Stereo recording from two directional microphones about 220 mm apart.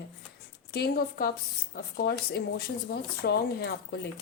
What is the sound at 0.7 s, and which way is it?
Speech, 45° left (ahead or behind).